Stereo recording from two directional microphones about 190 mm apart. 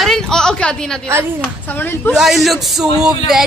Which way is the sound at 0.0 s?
5° left (ahead or behind).